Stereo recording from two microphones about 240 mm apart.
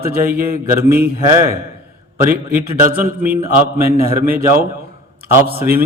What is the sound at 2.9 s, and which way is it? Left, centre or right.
A man's voice, right.